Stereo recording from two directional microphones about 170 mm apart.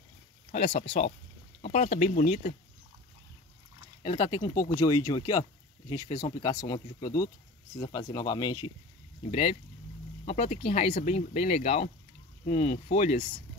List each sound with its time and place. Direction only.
0.5 s speech: 40° left (ahead or behind)
4.0 s speech: 30° left (ahead or behind)
9.3 s speech: 35° left (ahead or behind)